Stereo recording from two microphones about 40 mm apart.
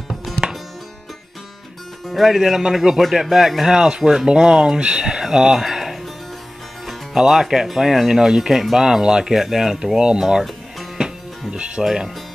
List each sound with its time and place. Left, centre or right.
0.1 s music: centre
2.0 s speech: centre
3.0 s speech: centre; by 5.2 s right
5.2 s a sound: centre
7.2 s speech: centre
8.8 s speech: centre
9.9 s speech: right
11.5 s speech: right
11.8 s speech: centre